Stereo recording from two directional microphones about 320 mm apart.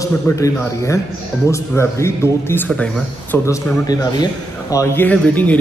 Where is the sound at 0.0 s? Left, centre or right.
Centre.